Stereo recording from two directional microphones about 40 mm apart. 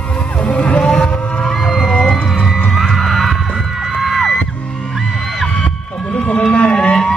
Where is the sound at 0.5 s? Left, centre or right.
Left.